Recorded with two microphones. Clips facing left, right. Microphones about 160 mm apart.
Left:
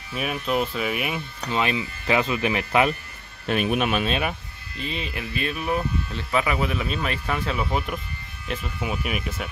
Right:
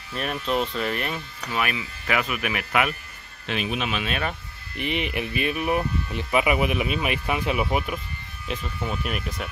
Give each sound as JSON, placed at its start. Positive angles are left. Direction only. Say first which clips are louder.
{"t": 0.1, "sound": "speech", "louder": "left 1 dB", "side_deg": 5}
{"t": 1.5, "sound": "speech", "louder": "left 3 dB", "side_deg": 25}
{"t": 3.4, "sound": "speech", "louder": "left 5 dB", "side_deg": 50}
{"t": 4.7, "sound": "speech", "louder": "right 4 dB", "side_deg": -20}
{"t": 8.5, "sound": "speech", "louder": "left 1 dB", "side_deg": 5}